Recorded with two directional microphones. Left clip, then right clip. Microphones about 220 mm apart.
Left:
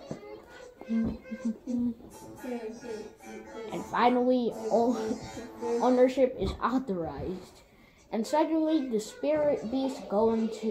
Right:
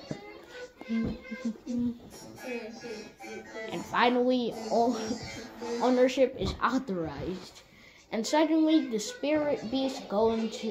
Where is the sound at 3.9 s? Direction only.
25° right (ahead or behind).